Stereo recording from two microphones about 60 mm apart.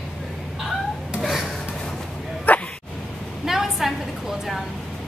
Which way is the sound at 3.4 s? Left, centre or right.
Centre.